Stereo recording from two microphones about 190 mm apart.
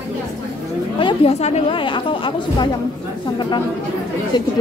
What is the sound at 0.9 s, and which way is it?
A woman's voice, 30° left (ahead or behind).